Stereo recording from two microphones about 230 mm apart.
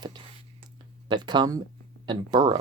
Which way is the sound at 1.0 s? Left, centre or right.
Centre.